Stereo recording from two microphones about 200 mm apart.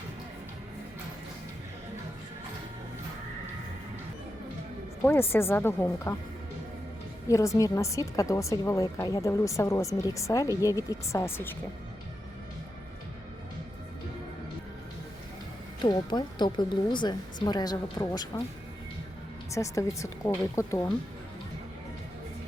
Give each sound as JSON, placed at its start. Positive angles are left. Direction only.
{"t": 5.3, "sound": "a woman's voice", "side_deg": 10}
{"t": 7.3, "sound": "a woman's voice", "side_deg": 15}
{"t": 15.8, "sound": "speech", "side_deg": 20}
{"t": 19.5, "sound": "a woman's voice", "side_deg": 15}